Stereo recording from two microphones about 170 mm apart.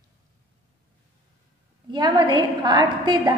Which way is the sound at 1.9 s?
25° right (ahead or behind).